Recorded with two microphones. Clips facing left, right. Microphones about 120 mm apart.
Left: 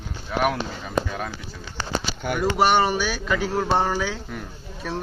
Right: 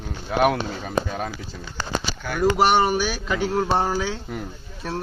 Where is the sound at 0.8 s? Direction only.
35° right (ahead or behind).